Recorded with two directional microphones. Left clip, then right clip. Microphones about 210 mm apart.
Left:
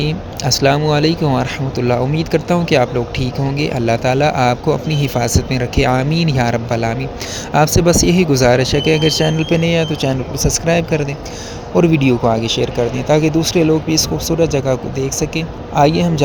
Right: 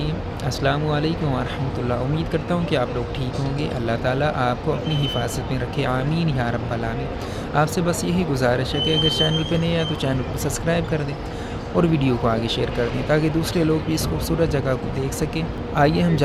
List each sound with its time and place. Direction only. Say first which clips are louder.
0.0 s speech: left 7 dB; 30° left (ahead or behind); by 16.2 s 15° left (ahead or behind)